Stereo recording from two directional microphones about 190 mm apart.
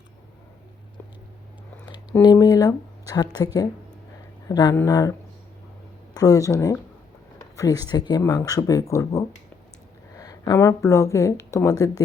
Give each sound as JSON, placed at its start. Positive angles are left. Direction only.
{"t": 2.2, "sound": "speech", "side_deg": 20}
{"t": 6.1, "sound": "speech", "side_deg": 20}